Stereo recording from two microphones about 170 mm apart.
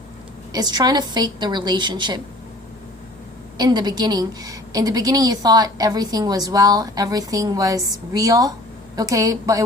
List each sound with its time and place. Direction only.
0.5 s a woman's voice: 25° right (ahead or behind)
3.6 s a woman's voice: 25° right (ahead or behind)